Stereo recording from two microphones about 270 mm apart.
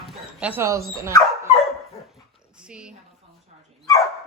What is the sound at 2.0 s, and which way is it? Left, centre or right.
Dog, centre.